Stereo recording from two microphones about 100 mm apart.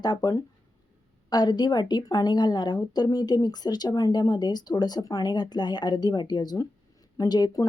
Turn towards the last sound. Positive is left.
turn(degrees=40)  # may be behind; listen again after turning